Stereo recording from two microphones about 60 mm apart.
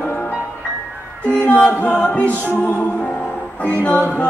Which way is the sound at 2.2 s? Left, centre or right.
Right.